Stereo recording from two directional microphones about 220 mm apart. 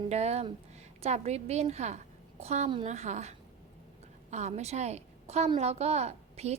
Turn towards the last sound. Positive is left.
turn(degrees=-30)  # may be behind; listen again after turning